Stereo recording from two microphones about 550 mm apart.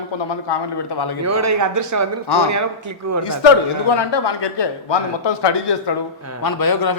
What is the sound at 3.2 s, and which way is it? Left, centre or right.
A man's voice, left.